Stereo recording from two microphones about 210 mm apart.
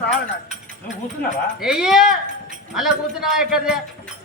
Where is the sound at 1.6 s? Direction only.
5° right (ahead or behind).